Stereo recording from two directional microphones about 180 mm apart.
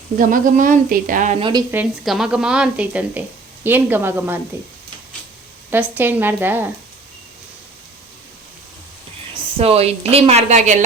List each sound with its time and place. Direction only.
0.2 s speech: 45° right (ahead or behind)
1.4 s speech: 25° right (ahead or behind)
1.7 s a woman's voice: 5° right (ahead or behind)
5.7 s a woman's voice: 10° right (ahead or behind)
9.6 s speech: 35° right (ahead or behind)